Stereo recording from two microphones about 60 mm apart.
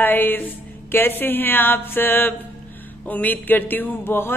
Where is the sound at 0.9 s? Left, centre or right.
Left.